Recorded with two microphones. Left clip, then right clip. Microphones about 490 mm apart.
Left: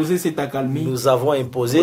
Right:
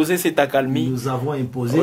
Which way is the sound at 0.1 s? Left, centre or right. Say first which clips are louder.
Right 4 dB; right.